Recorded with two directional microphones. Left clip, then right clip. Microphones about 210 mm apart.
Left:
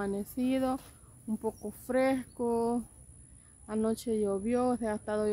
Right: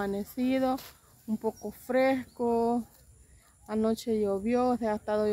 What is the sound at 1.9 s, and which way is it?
Speech, 20° left (ahead or behind).